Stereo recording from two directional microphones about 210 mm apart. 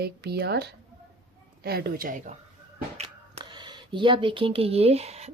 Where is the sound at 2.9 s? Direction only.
25° right (ahead or behind).